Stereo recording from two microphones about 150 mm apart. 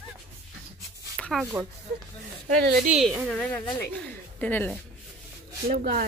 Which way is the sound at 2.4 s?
90° right.